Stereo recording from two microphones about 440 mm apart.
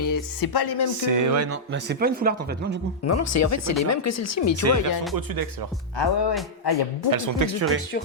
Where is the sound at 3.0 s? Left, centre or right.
Left.